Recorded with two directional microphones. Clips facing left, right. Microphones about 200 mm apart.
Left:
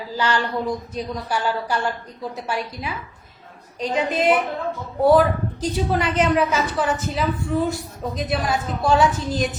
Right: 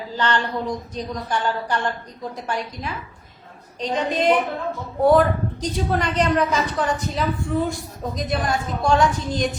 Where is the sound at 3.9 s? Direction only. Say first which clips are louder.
Even; 5° left (ahead or behind).